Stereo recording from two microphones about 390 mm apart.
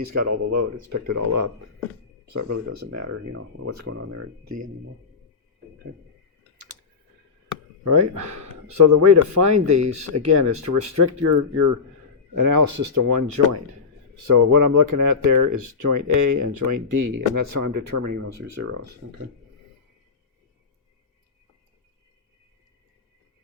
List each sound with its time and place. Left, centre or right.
0.0 s speech: right
7.9 s speech: right
18.6 s speech: right